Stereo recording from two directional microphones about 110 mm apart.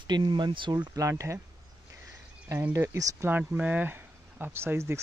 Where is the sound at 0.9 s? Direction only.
30° right (ahead or behind).